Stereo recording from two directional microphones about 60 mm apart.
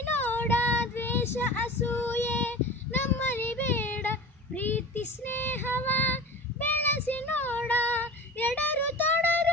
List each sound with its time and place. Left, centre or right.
0.0 s child singing: left